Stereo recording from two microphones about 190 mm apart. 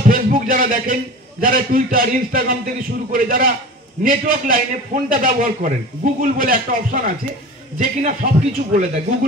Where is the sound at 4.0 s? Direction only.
45° right (ahead or behind).